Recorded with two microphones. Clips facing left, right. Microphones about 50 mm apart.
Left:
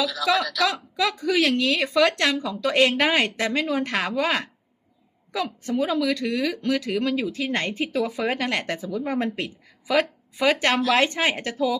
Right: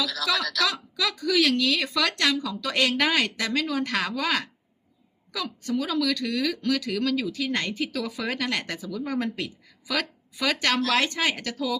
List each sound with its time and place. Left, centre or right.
0.0 s speech: centre
0.7 s speech: left